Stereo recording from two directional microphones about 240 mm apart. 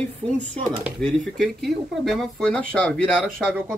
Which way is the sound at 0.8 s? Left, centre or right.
Centre.